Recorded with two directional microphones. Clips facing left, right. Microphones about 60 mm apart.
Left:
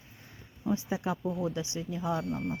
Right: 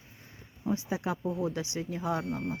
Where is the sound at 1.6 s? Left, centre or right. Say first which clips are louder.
Right 1 dB; right.